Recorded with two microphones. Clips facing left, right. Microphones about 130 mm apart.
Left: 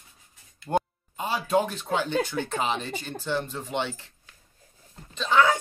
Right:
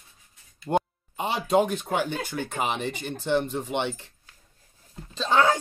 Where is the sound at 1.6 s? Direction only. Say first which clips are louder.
Right 2 dB; 15° right (ahead or behind).